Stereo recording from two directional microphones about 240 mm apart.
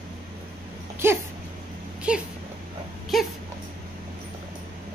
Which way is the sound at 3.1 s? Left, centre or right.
Centre.